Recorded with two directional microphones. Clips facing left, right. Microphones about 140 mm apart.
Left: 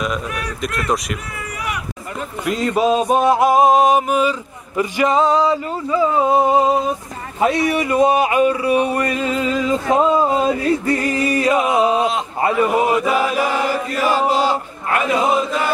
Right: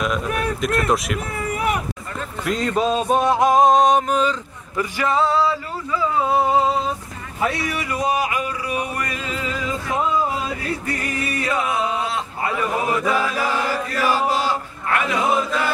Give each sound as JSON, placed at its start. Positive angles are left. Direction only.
{"t": 0.8, "sound": "speech", "side_deg": 0}
{"t": 2.4, "sound": "music", "side_deg": 5}
{"t": 4.7, "sound": "a sound", "side_deg": 20}
{"t": 7.3, "sound": "speech", "side_deg": 25}
{"t": 12.8, "sound": "chant", "side_deg": 20}